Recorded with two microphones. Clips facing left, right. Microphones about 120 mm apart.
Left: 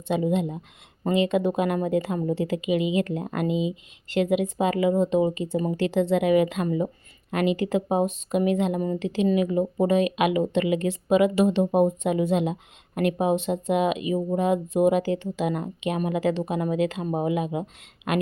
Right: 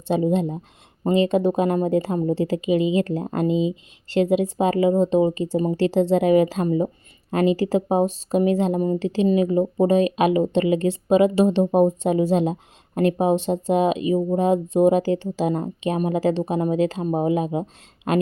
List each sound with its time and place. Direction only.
0.1 s speech: 35° right (ahead or behind)